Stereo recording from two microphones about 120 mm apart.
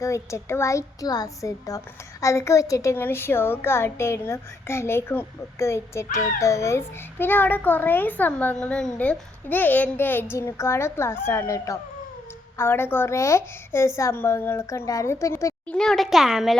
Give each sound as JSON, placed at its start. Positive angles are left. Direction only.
{"t": 0.0, "sound": "a woman's voice", "side_deg": 25}
{"t": 15.7, "sound": "a child's voice", "side_deg": 5}